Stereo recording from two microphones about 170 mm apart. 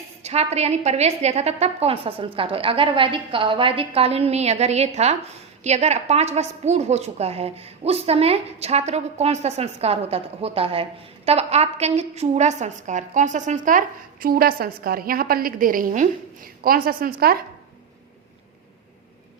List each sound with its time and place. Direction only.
0.2 s a woman's voice: 40° right (ahead or behind); by 17.4 s 60° right (ahead or behind)